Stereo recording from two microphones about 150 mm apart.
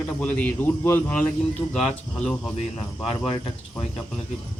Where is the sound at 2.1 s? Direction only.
5° left (ahead or behind).